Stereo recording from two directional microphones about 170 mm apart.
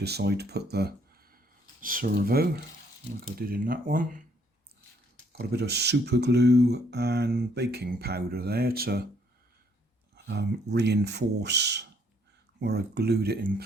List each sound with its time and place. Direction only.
0.0 s speech: 75° right (ahead or behind)
1.8 s speech: 55° right (ahead or behind)
5.4 s speech: 70° right (ahead or behind)
10.2 s speech: 80° right
12.5 s speech: 75° right (ahead or behind)